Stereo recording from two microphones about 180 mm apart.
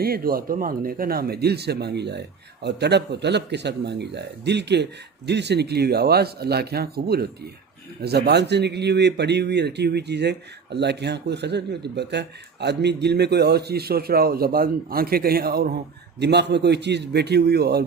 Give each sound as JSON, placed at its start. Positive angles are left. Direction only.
{"t": 0.0, "sound": "speech", "side_deg": -55}
{"t": 16.2, "sound": "speech", "side_deg": -70}